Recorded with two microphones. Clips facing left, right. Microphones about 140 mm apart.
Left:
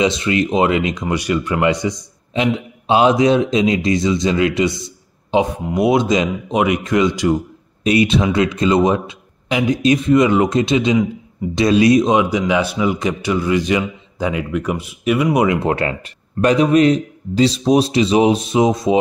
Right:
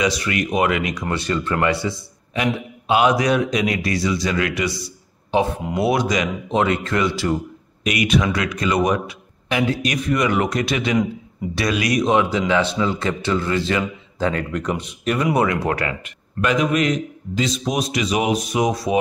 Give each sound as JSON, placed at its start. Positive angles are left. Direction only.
{"t": 0.0, "sound": "a man's voice", "side_deg": 25}
{"t": 1.0, "sound": "a man's voice", "side_deg": 15}
{"t": 6.5, "sound": "speech", "side_deg": 15}
{"t": 7.8, "sound": "a man's voice", "side_deg": 30}